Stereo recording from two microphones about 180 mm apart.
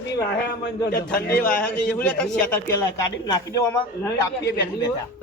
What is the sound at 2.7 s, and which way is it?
A man's voice, 20° left (ahead or behind).